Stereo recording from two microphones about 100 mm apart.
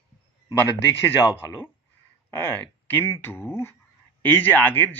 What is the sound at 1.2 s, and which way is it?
Speech, 25° left (ahead or behind).